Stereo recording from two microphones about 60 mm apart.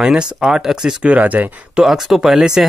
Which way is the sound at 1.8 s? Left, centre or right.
Centre.